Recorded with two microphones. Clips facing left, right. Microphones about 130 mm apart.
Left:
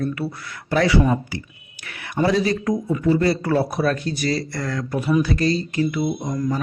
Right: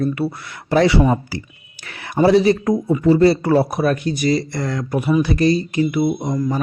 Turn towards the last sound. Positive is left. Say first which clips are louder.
# right 4 dB
turn(degrees=-20)  # may be behind; listen again after turning